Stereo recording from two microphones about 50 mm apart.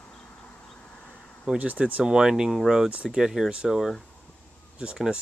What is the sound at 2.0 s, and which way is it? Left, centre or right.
Speech, centre.